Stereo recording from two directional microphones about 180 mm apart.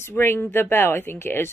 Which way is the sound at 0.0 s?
15° left (ahead or behind).